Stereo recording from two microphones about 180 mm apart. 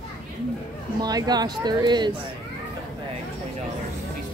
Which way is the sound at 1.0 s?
20° right (ahead or behind).